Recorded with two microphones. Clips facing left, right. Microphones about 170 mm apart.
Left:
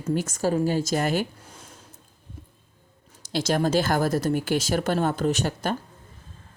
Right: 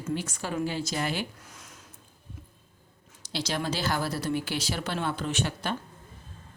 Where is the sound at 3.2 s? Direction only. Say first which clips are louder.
Left 8 dB; 50° left (ahead or behind).